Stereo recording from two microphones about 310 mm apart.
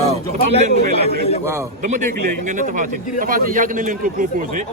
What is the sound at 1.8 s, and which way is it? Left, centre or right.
A man's voice, right.